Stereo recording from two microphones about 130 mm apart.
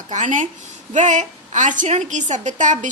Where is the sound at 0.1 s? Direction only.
75° right (ahead or behind).